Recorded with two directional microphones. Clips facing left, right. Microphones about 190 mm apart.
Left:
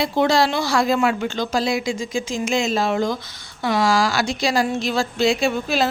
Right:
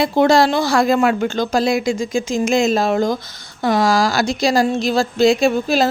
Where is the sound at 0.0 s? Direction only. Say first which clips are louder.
Right 5 dB; 50° right (ahead or behind).